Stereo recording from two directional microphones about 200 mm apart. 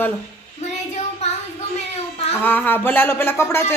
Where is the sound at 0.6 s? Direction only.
35° left (ahead or behind).